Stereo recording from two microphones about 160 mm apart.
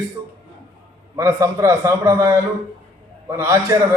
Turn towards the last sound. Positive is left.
turn(degrees=-20)  # may be behind; listen again after turning